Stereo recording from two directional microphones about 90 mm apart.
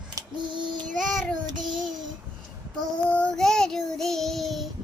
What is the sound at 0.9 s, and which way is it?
Child singing, 5° left (ahead or behind).